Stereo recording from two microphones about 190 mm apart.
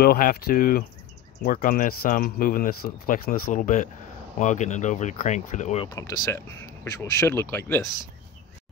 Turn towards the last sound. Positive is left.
turn(degrees=15)  # may be behind; listen again after turning